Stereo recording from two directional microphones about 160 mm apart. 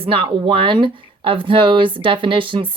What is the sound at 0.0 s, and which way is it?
Speech, 35° right (ahead or behind).